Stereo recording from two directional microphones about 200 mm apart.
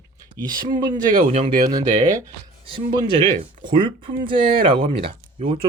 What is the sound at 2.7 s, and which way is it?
Speech, 25° right (ahead or behind).